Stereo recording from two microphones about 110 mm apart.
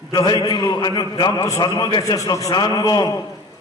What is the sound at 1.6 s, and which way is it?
A man's voice, 40° left (ahead or behind).